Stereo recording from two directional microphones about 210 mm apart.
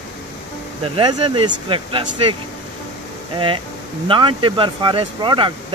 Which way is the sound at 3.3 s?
25° right (ahead or behind).